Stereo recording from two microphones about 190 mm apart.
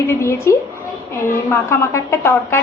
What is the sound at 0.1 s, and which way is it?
A woman's voice, 15° left (ahead or behind).